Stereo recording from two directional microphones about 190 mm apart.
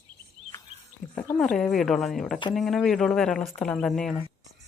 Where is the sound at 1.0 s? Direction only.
40° left (ahead or behind).